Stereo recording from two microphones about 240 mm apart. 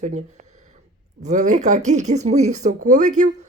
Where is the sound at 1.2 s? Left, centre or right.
Right.